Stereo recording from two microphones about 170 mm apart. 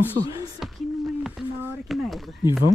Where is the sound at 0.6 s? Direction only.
Centre (ahead or behind).